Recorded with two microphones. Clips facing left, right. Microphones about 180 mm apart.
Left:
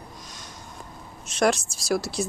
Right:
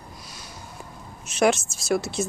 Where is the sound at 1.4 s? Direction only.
5° right (ahead or behind).